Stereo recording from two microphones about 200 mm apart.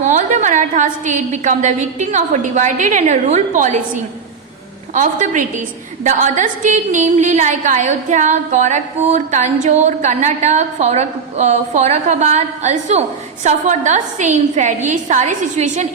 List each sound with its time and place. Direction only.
0.0 s a woman's voice: 40° right (ahead or behind)